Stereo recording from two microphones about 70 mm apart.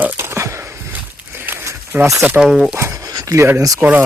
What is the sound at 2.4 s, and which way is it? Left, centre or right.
Speech, centre.